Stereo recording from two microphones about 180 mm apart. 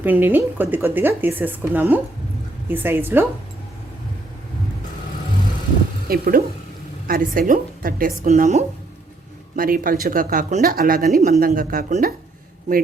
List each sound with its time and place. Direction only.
0.0 s speech: 10° right (ahead or behind)
6.1 s speech: 55° right (ahead or behind)
9.6 s speech: 50° right (ahead or behind)